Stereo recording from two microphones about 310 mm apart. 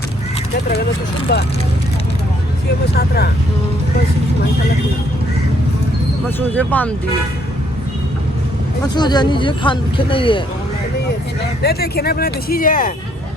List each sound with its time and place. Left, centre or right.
1.3 s speech: left
2.9 s speech: left
6.2 s speech: centre
9.0 s speech: centre
11.6 s speech: left